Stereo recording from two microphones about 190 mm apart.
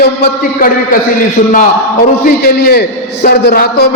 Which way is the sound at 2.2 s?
55° left (ahead or behind).